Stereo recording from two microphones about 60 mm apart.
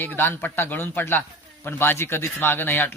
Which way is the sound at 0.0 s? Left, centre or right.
Left.